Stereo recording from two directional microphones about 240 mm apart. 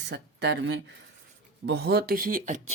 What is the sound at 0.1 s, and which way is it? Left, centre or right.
Speech, right.